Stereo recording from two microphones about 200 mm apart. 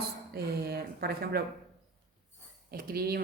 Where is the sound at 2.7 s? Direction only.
50° right (ahead or behind).